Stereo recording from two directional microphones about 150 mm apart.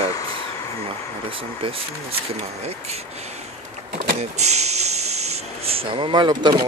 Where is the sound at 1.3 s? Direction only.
40° right (ahead or behind).